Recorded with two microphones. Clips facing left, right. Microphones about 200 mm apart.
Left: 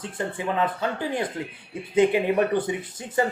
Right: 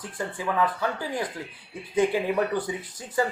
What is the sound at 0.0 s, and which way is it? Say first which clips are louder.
Speech: left 2 dB; 25° left (ahead or behind).